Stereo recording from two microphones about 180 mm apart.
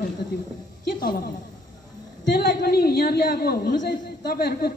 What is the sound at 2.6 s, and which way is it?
A woman's voice, 60° left (ahead or behind).